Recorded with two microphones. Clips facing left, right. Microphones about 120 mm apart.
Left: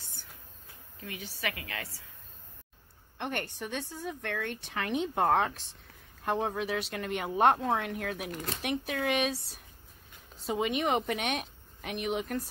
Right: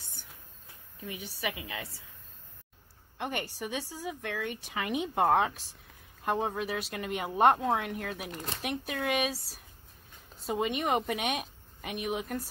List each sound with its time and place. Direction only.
0.0 s train: 15° right (ahead or behind)
1.0 s a woman's voice: 15° right (ahead or behind)
3.2 s a woman's voice: 5° right (ahead or behind)